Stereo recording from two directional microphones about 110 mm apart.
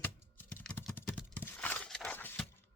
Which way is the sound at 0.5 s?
20° left (ahead or behind).